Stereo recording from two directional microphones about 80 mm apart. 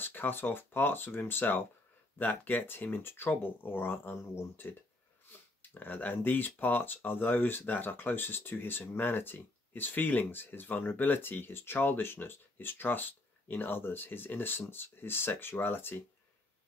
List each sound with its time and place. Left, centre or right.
0.0 s speech: left